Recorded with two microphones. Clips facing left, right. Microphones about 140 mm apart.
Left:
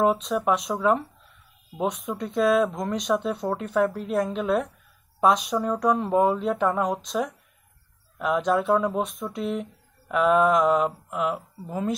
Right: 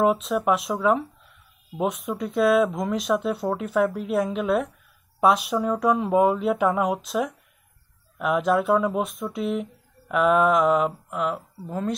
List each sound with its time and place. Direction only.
0.0 s speech: centre (ahead or behind)